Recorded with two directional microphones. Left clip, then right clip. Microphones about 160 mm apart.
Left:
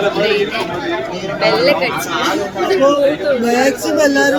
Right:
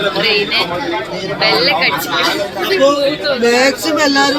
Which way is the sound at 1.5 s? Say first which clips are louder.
Even; 10° left (ahead or behind).